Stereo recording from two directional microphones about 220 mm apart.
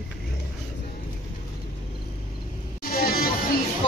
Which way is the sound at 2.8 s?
40° left (ahead or behind).